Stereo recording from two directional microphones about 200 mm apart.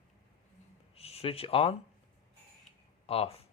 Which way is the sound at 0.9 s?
30° left (ahead or behind).